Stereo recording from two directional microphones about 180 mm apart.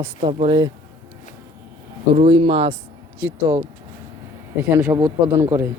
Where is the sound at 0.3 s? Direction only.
30° right (ahead or behind).